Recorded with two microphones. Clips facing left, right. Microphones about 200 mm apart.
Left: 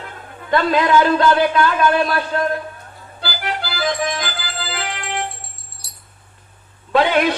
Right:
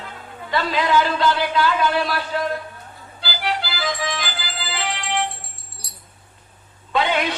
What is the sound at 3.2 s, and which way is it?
Music, 50° left (ahead or behind).